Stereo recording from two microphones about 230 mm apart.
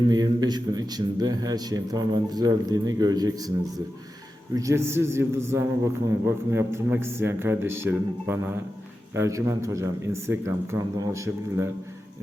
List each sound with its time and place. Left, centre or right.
0.1 s a man's voice: centre
4.5 s a man's voice: centre